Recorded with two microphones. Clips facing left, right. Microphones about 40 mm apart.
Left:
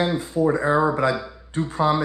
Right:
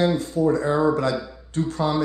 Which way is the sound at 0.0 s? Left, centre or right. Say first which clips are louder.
Right 1 dB; centre.